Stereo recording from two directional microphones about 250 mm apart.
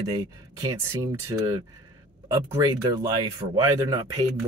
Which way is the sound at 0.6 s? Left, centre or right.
Centre.